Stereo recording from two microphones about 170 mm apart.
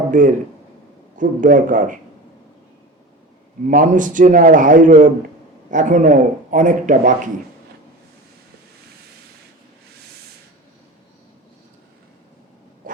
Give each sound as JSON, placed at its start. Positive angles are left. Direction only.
{"t": 0.1, "sound": "a man's voice", "side_deg": -50}
{"t": 3.7, "sound": "speech", "side_deg": -50}
{"t": 12.8, "sound": "a sound", "side_deg": -50}